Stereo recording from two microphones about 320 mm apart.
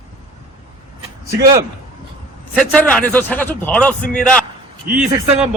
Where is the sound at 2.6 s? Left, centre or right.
Centre.